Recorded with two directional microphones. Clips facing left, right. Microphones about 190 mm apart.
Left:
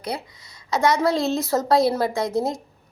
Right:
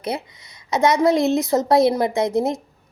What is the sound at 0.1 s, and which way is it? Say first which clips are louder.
Speech: right 3 dB; 20° right (ahead or behind).